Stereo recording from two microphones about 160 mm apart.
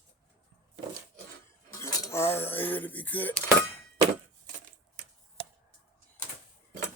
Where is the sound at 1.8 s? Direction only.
15° left (ahead or behind).